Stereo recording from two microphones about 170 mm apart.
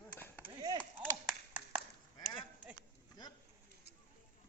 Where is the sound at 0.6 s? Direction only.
20° right (ahead or behind).